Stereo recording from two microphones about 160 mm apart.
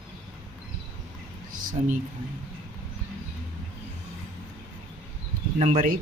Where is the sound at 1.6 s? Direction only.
60° right (ahead or behind).